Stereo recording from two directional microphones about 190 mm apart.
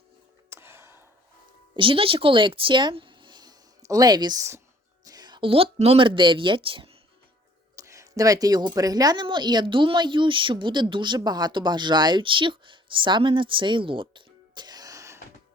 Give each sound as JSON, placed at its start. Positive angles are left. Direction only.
{"t": 0.5, "sound": "a sound", "side_deg": -15}
{"t": 1.7, "sound": "speech", "side_deg": -25}
{"t": 7.8, "sound": "a woman's voice", "side_deg": -15}